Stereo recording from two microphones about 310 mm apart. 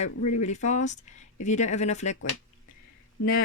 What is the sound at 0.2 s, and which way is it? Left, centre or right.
Speech, left.